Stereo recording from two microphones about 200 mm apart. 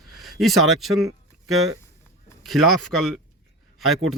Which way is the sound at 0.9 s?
90° right.